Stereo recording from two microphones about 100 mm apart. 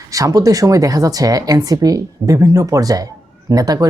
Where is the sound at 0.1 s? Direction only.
35° right (ahead or behind).